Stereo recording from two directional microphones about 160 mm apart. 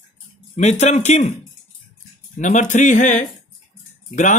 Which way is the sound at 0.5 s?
45° left (ahead or behind).